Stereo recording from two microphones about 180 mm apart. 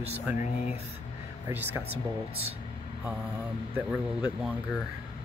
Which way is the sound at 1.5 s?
10° right (ahead or behind).